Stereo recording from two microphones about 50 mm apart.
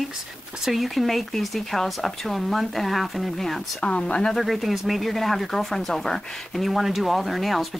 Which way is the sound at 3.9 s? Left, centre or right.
Left.